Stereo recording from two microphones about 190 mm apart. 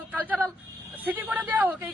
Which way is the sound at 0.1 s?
10° right (ahead or behind).